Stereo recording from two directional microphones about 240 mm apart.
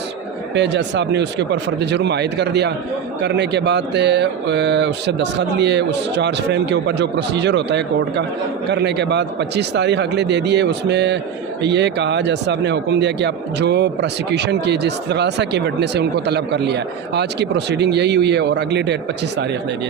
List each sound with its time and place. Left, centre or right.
0.5 s speech: right